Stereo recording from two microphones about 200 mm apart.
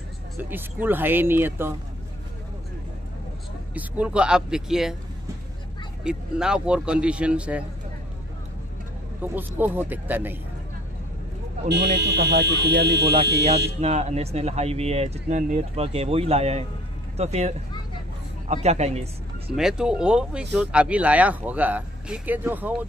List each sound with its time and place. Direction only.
0.4 s speech: 10° right (ahead or behind)
3.7 s a man's voice: 5° right (ahead or behind)
6.0 s a man's voice: 5° right (ahead or behind)
9.2 s speech: 10° right (ahead or behind)
11.6 s speech: 55° right (ahead or behind)
13.7 s speech: 35° right (ahead or behind)
19.5 s a man's voice: 5° right (ahead or behind)